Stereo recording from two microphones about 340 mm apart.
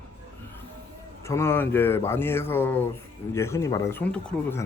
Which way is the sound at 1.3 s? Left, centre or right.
Centre.